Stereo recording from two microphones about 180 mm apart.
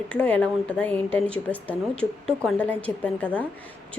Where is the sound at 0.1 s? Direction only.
5° left (ahead or behind).